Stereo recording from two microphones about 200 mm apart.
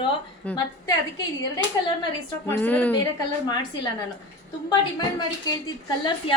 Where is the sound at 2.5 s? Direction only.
10° left (ahead or behind).